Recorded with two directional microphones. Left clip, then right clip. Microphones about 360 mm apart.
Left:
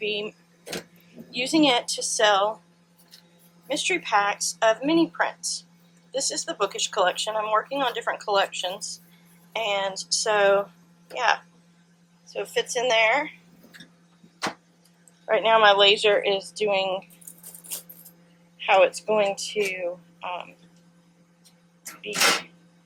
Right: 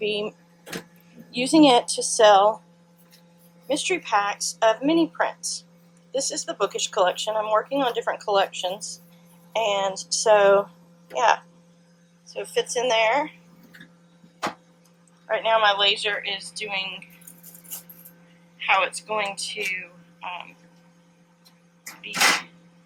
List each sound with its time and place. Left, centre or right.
0.0 s speech: centre
3.7 s speech: centre
15.3 s speech: centre
18.5 s speech: centre